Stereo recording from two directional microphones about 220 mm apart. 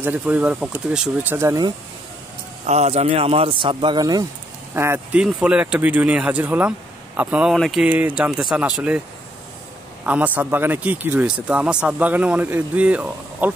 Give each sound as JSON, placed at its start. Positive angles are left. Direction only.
{"t": 0.0, "sound": "speech", "side_deg": -10}
{"t": 2.6, "sound": "a man's voice", "side_deg": -30}
{"t": 10.0, "sound": "speech", "side_deg": -5}